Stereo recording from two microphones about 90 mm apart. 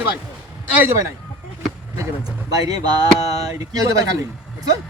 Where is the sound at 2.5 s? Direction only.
45° right (ahead or behind).